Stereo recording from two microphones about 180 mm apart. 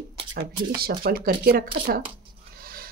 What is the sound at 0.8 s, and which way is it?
Speech, 55° right (ahead or behind).